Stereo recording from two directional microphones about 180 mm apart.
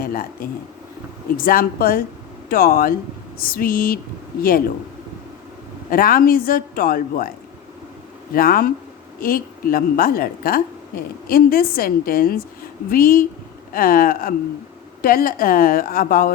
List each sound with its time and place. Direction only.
0.0 s a woman's voice: 55° left (ahead or behind)
5.9 s a man's voice: 50° left (ahead or behind)